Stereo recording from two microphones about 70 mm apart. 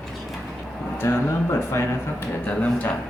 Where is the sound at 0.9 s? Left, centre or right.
Left.